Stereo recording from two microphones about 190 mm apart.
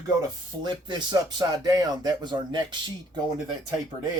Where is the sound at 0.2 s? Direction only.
25° right (ahead or behind).